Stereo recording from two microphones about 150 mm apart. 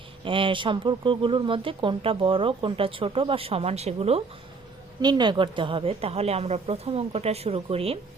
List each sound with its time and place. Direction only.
0.3 s speech: 35° right (ahead or behind)
5.0 s speech: 30° right (ahead or behind)